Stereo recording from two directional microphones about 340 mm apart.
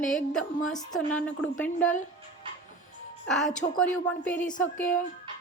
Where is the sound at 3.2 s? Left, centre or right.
Centre.